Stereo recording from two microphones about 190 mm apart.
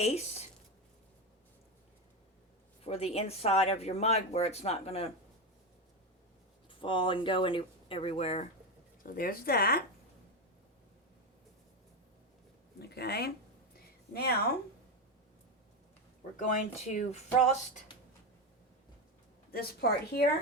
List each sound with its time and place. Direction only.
0.0 s speech: 35° left (ahead or behind)
2.8 s speech: 30° left (ahead or behind)
6.7 s speech: 25° left (ahead or behind)
9.0 s a woman's voice: 50° left (ahead or behind)
12.8 s speech: 55° left (ahead or behind)
13.7 s a sound: 55° left (ahead or behind)
16.4 s speech: 40° left (ahead or behind)
19.5 s a woman's voice: 55° left (ahead or behind)